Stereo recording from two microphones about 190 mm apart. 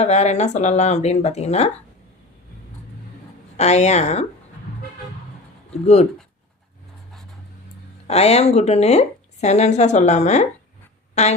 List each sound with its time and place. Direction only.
0.0 s speech: 35° left (ahead or behind)
3.6 s speech: 35° left (ahead or behind)
5.7 s speech: 35° left (ahead or behind)
8.0 s speech: 35° left (ahead or behind)